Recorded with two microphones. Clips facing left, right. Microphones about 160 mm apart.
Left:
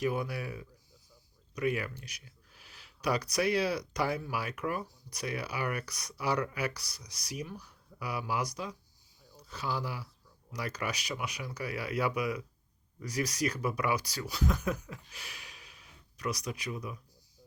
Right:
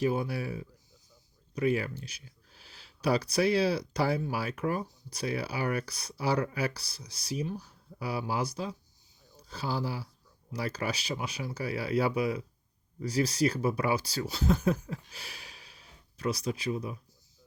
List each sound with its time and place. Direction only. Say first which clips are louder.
0.0 s speech: right 3 dB; 30° right (ahead or behind)